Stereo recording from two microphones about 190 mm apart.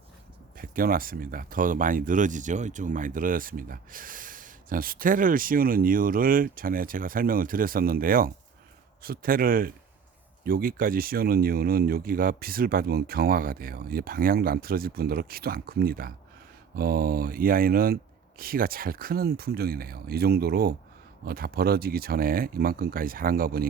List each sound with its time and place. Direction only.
0.5 s speech: 50° right (ahead or behind)